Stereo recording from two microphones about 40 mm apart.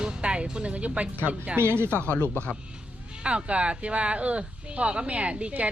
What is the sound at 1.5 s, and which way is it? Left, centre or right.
Speech, right.